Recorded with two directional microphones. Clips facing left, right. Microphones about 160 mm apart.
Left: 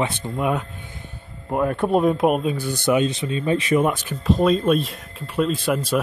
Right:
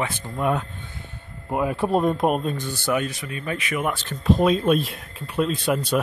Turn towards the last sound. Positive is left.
turn(degrees=0)  # may be behind; listen again after turning